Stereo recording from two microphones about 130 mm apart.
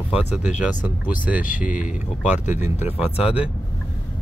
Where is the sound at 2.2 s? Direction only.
65° left (ahead or behind).